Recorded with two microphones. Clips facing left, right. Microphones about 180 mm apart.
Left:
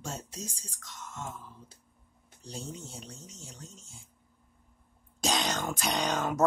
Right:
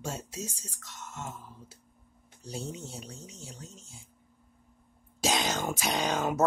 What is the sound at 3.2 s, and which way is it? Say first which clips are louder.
Speech: right 3 dB; 65° right (ahead or behind).